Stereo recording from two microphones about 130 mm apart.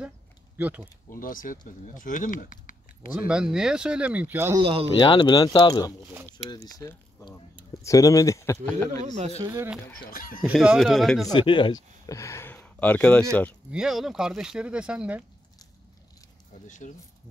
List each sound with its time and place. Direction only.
0.6 s speech: 15° right (ahead or behind)
1.1 s speech: 90° left
3.1 s speech: 10° right (ahead or behind)
4.6 s speech: 45° right (ahead or behind)
4.9 s speech: 35° left (ahead or behind)
8.9 s a man's voice: 60° right (ahead or behind)
9.4 s speech: 20° right (ahead or behind)
10.0 s speech: 90° left
10.5 s speech: 5° right (ahead or behind)
11.3 s speech: 40° left (ahead or behind); by 12.5 s 20° left (ahead or behind)
12.5 s speech: 10° left (ahead or behind)
13.7 s speech: 5° right (ahead or behind)
16.6 s speech: 70° left (ahead or behind)